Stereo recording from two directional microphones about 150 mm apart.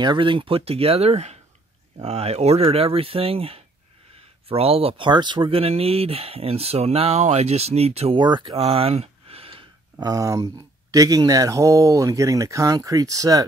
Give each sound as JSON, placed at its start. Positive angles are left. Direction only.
{"t": 0.0, "sound": "speech", "side_deg": -30}
{"t": 8.2, "sound": "speech", "side_deg": -30}
{"t": 8.6, "sound": "a sound", "side_deg": -40}
{"t": 10.0, "sound": "speech", "side_deg": -25}